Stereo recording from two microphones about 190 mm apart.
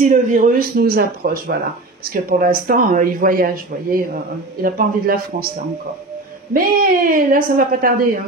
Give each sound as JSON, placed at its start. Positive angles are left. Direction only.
{"t": 0.0, "sound": "speech", "side_deg": -45}
{"t": 6.5, "sound": "speech", "side_deg": -45}